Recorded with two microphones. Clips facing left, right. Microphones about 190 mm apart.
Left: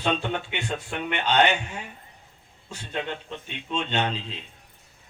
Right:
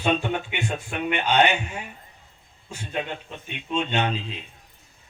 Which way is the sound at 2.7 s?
15° right (ahead or behind).